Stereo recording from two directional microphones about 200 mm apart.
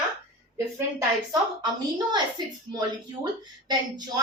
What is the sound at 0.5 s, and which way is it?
A woman's voice, 15° right (ahead or behind).